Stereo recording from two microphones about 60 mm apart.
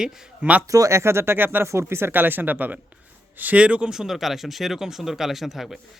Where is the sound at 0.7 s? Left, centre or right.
Right.